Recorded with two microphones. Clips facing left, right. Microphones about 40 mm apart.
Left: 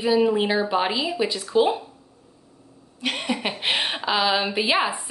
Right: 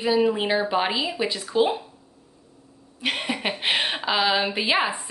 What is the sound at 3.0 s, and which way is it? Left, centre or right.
A woman's voice, centre.